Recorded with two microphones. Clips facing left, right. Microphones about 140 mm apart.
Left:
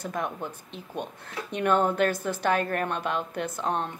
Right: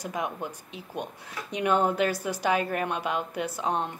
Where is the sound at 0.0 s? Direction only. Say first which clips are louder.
Even; 10° right (ahead or behind).